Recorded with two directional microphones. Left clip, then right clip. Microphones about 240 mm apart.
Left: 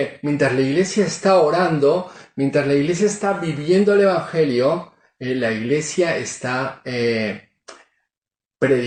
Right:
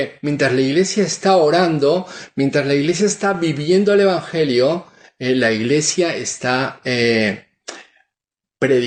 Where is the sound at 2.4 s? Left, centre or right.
Right.